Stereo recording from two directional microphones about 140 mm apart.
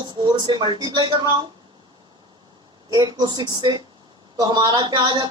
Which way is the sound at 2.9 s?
30° right (ahead or behind).